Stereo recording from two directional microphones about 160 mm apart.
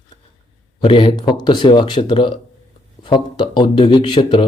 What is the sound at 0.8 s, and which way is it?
A man's voice, 35° left (ahead or behind).